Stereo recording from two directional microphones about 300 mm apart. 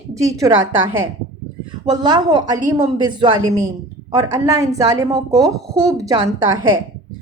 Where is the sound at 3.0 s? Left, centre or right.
Centre.